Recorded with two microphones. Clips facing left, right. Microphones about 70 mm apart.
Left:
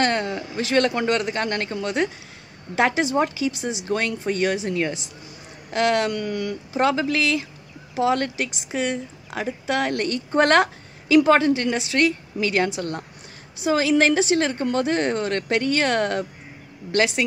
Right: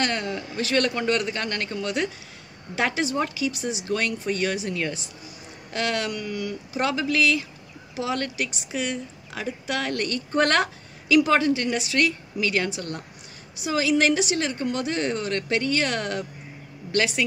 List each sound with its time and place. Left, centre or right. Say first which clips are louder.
0.0 s speech: left 4 dB; left
6.7 s speech: left 4 dB; left